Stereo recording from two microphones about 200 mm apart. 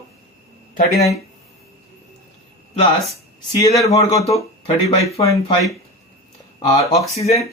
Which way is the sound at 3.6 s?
15° left (ahead or behind).